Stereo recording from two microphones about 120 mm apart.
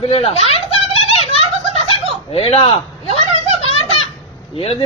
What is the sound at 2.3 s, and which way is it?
Speech, 55° left (ahead or behind).